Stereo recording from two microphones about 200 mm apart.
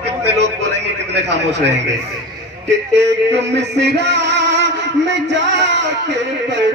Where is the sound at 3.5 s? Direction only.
60° right (ahead or behind).